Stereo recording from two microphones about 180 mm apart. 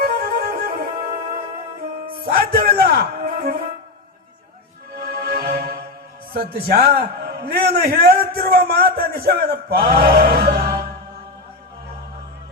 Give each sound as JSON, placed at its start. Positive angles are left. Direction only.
{"t": 0.0, "sound": "music", "side_deg": -60}
{"t": 2.0, "sound": "speech", "side_deg": -55}
{"t": 4.9, "sound": "music", "side_deg": -55}
{"t": 6.3, "sound": "a man's voice", "side_deg": -55}